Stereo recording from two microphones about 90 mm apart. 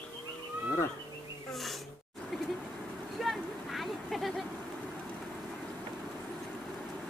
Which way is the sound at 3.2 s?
Centre (ahead or behind).